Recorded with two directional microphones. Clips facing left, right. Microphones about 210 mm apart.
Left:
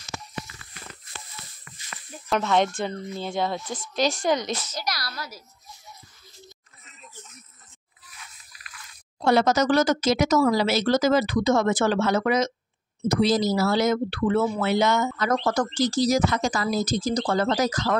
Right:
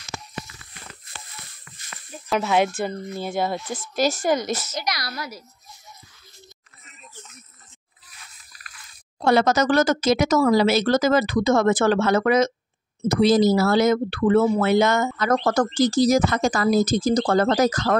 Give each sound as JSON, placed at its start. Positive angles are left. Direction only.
{"t": 2.2, "sound": "a woman's voice", "side_deg": -5}
{"t": 9.2, "sound": "speech", "side_deg": -55}